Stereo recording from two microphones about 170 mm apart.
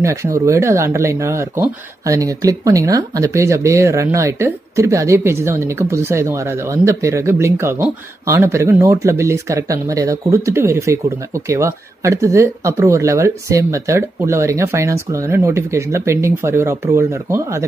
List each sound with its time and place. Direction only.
0.0 s speech: 15° right (ahead or behind)